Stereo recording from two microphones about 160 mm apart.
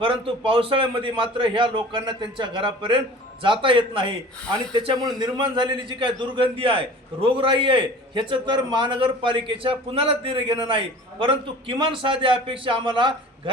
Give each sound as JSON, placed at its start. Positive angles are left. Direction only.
{"t": 0.0, "sound": "a man's voice", "side_deg": -35}
{"t": 4.4, "sound": "speech", "side_deg": 5}
{"t": 4.7, "sound": "a man's voice", "side_deg": -30}